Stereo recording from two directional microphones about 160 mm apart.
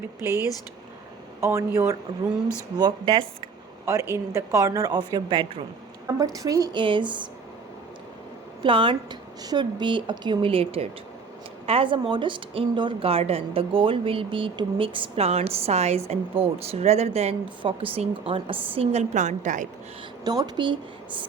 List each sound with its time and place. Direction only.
0.2 s speech: 10° right (ahead or behind)
1.4 s speech: 15° right (ahead or behind)
2.7 s a woman's voice: 30° right (ahead or behind)
3.8 s a woman's voice: 20° right (ahead or behind)
8.6 s a woman's voice: 30° right (ahead or behind); by 19.6 s 50° right (ahead or behind)
20.2 s a woman's voice: 25° right (ahead or behind)